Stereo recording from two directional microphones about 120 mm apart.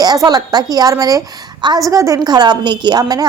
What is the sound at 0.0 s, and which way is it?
A woman's voice, 35° right (ahead or behind).